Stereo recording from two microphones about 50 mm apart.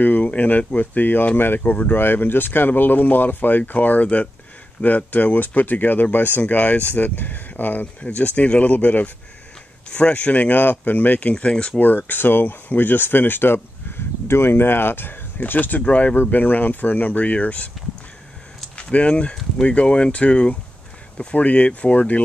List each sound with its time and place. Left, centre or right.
0.0 s speech: left
2.0 s speech: left
6.5 s speech: left
9.8 s speech: centre
10.5 s speech: left
12.1 s speech: left
15.9 s speech: left
16.2 s speech: left
18.8 s speech: left